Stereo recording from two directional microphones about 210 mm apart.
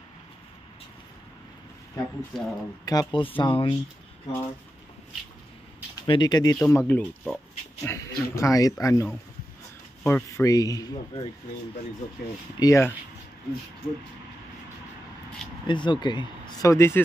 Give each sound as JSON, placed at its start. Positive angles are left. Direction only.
{"t": 2.0, "sound": "speech", "side_deg": 0}
{"t": 2.8, "sound": "speech", "side_deg": 20}
{"t": 6.0, "sound": "speech", "side_deg": 20}
{"t": 12.5, "sound": "speech", "side_deg": 15}
{"t": 15.6, "sound": "speech", "side_deg": 20}